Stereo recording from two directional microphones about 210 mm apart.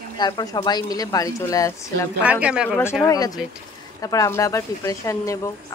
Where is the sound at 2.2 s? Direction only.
5° right (ahead or behind).